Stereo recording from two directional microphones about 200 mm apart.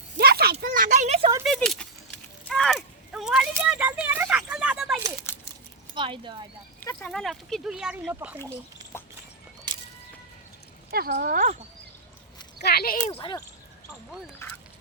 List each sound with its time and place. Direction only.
0.2 s a sound: 50° right (ahead or behind); by 1.3 s 35° right (ahead or behind)
1.5 s a sound: centre (ahead or behind)
5.3 s a sound: 10° left (ahead or behind)
6.0 s speech: 25° right (ahead or behind)
6.7 s speech: 10° left (ahead or behind); by 8.4 s 10° right (ahead or behind)
8.8 s horse: 20° right (ahead or behind)
10.9 s speech: 50° right (ahead or behind)
12.5 s speech: 50° left (ahead or behind)
13.1 s speech: 25° left (ahead or behind)